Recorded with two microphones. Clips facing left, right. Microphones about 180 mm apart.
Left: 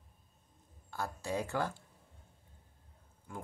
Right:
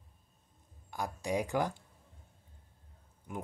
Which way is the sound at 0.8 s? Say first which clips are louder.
Right 2 dB; 15° right (ahead or behind).